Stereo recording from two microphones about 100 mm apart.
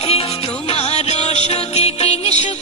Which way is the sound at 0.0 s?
80° left.